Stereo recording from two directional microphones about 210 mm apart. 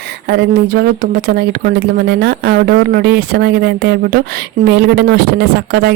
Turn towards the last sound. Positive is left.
turn(degrees=-50)  # may be behind; listen again after turning